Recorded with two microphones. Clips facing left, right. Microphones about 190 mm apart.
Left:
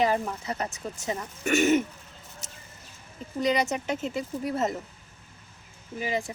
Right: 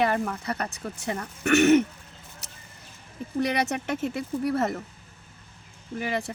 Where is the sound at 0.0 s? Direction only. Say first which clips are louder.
Even; 60° right (ahead or behind).